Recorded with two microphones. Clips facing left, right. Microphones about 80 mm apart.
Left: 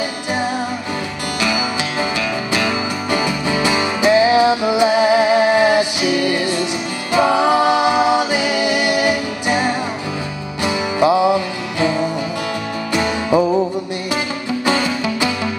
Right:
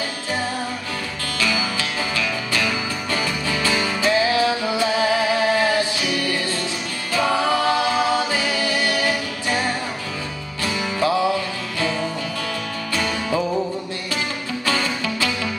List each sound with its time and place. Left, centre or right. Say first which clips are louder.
1.4 s music: left 3 dB; centre
7.1 s singing: left 6 dB; centre
10.6 s music: left 6 dB; centre
14.7 s music: left 5 dB; centre